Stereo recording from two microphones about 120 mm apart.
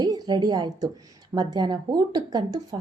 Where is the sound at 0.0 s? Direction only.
35° right (ahead or behind).